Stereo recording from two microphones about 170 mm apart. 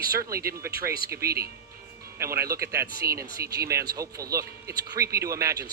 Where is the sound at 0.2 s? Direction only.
20° right (ahead or behind).